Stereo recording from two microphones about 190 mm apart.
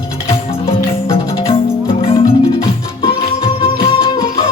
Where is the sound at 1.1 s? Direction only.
30° left (ahead or behind).